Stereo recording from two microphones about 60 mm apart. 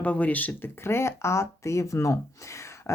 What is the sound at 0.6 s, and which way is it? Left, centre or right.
Speech, left.